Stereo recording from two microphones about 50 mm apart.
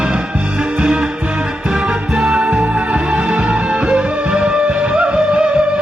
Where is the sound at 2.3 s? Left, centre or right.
Right.